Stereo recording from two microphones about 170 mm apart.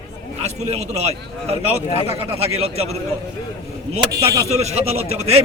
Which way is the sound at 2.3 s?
35° right (ahead or behind).